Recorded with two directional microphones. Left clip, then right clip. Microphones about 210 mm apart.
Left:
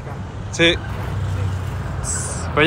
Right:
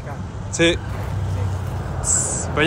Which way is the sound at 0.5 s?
10° right (ahead or behind).